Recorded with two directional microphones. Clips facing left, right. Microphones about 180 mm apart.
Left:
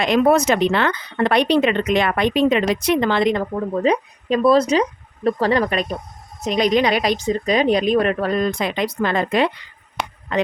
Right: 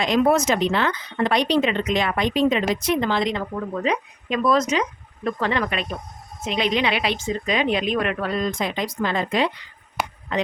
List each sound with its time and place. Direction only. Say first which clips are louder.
0.0 s speech: left 3 dB; 60° left (ahead or behind)
3.5 s speech: left 5 dB; 35° left (ahead or behind)
8.4 s speech: left 4 dB; 65° left (ahead or behind)
10.0 s speech: even; 5° right (ahead or behind)